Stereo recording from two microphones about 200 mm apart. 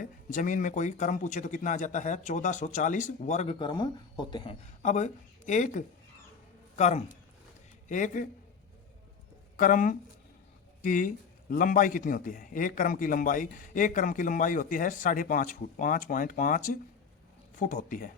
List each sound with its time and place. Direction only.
0.0 s speech: 40° left (ahead or behind); by 4.5 s 20° left (ahead or behind)
4.8 s a man's voice: 35° left (ahead or behind)
9.6 s a man's voice: 40° left (ahead or behind)